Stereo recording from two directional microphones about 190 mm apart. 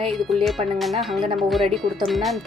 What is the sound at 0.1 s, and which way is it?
Speech, centre (ahead or behind).